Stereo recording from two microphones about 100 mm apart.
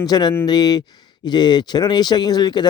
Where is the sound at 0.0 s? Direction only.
45° left (ahead or behind).